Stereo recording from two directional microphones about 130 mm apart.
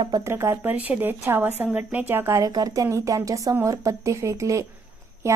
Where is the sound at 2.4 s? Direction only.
30° right (ahead or behind).